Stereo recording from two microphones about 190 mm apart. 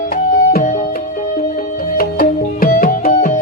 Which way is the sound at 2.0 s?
50° left (ahead or behind).